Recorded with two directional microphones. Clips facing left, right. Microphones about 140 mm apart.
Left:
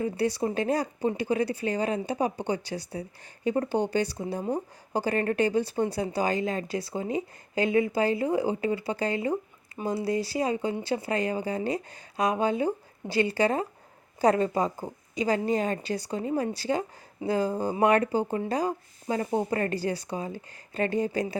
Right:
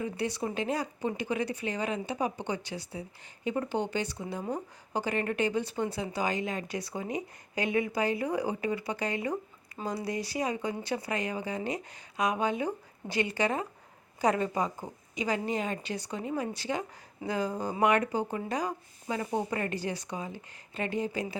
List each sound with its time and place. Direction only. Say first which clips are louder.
0.0 s speech: left 5 dB; 35° left (ahead or behind)